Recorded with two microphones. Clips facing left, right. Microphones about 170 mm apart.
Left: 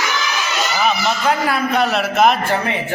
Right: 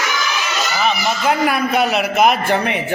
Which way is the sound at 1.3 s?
15° right (ahead or behind).